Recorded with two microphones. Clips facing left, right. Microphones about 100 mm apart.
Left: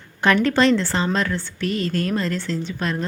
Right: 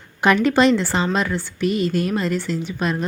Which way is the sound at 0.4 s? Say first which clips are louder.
Right 2 dB; 15° right (ahead or behind).